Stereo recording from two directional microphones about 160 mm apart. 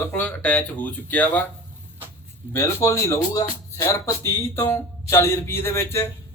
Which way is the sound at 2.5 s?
15° left (ahead or behind).